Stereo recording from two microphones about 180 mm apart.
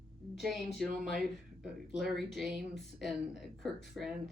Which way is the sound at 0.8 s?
Centre (ahead or behind).